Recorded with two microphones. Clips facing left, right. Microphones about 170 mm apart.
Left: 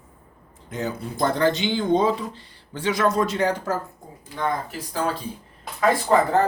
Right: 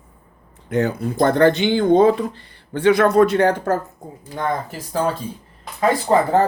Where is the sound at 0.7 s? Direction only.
60° right (ahead or behind).